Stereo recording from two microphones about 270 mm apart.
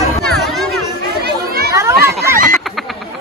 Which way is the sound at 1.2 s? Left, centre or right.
Right.